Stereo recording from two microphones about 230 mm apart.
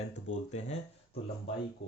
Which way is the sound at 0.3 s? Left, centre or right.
Left.